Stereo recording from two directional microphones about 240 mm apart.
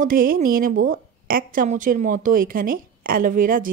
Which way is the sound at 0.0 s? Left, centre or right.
Right.